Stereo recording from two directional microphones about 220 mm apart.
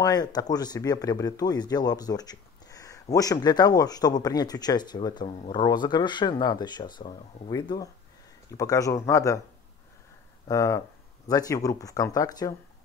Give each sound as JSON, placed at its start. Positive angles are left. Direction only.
{"t": 0.0, "sound": "speech", "side_deg": 20}
{"t": 10.5, "sound": "speech", "side_deg": 15}